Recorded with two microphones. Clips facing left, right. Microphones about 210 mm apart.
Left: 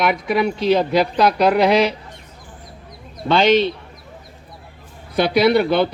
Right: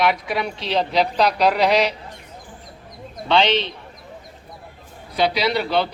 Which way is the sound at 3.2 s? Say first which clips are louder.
Left 4 dB; 50° left (ahead or behind).